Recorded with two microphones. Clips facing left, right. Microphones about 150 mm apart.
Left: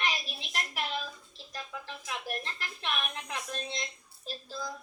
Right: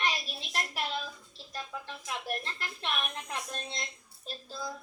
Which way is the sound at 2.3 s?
30° right (ahead or behind).